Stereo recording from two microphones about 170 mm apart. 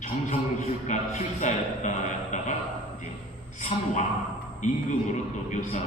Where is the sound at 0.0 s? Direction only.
45° left (ahead or behind).